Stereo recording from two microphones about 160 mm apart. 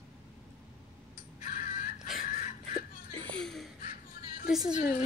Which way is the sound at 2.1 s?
60° left (ahead or behind).